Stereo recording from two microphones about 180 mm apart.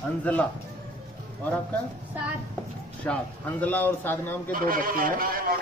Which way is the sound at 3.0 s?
5° left (ahead or behind).